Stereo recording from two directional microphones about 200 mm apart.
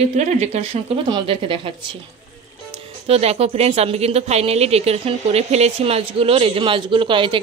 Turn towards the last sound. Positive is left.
turn(degrees=-25)  # may be behind; listen again after turning